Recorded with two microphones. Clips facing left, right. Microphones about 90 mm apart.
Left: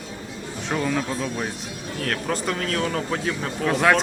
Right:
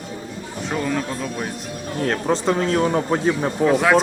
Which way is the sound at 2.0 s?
25° right (ahead or behind).